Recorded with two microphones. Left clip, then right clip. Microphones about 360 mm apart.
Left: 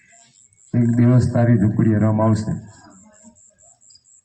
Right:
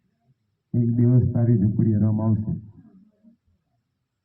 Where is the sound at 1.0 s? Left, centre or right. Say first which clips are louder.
Left 6 dB; left.